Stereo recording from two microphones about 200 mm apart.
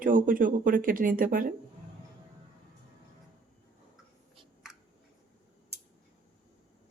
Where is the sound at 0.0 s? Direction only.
45° right (ahead or behind).